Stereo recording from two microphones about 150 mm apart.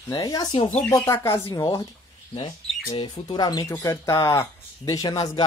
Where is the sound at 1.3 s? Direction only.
30° left (ahead or behind).